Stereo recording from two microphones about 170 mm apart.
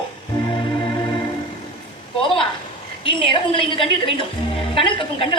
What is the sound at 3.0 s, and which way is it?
A woman's voice, 30° left (ahead or behind).